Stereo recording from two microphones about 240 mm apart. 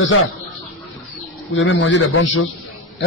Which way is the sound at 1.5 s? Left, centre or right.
Left.